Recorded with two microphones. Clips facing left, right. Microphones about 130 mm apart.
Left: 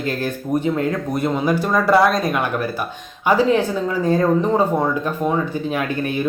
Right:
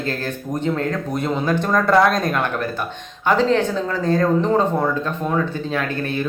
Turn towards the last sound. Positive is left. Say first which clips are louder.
# left 1 dB
turn(degrees=15)  # may be behind; listen again after turning